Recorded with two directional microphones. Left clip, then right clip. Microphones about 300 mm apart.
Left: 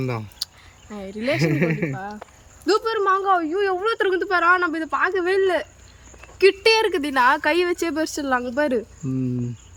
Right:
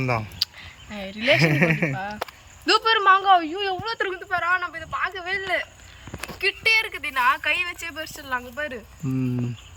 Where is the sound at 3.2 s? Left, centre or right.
Centre.